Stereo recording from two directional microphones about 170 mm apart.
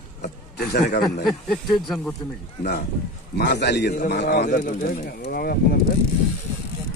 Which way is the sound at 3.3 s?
75° left (ahead or behind).